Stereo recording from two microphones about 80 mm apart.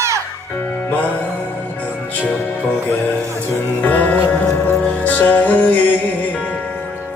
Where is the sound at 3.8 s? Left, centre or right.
Left.